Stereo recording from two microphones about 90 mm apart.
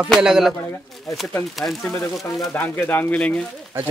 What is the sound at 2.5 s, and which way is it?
Speech, 20° left (ahead or behind).